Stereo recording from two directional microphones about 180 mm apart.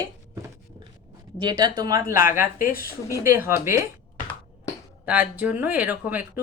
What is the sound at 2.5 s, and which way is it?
Speech, 50° left (ahead or behind).